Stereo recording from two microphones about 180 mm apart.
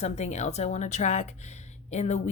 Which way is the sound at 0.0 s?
40° left (ahead or behind).